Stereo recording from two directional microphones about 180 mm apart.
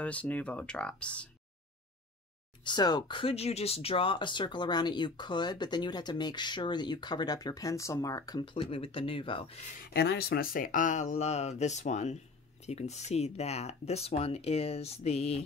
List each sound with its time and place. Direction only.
0.0 s speech: 10° left (ahead or behind)
2.6 s speech: 25° left (ahead or behind)
9.9 s speech: 65° left (ahead or behind); by 15.4 s 35° left (ahead or behind)